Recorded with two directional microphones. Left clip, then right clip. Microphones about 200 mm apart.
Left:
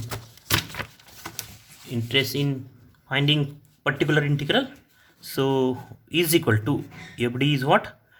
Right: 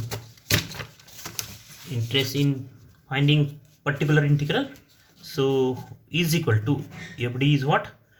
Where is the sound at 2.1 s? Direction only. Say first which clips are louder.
Left 1 dB; 40° left (ahead or behind).